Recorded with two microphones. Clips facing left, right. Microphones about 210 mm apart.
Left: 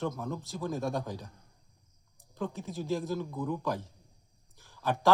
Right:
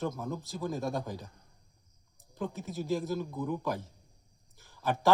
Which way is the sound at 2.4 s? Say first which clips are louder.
Even; 5° right (ahead or behind).